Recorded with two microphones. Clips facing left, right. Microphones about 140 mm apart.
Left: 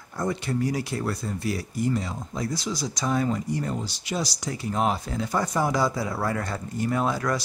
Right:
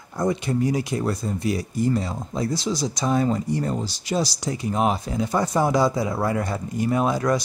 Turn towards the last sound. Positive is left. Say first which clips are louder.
# right 4 dB
turn(degrees=-20)  # may be behind; listen again after turning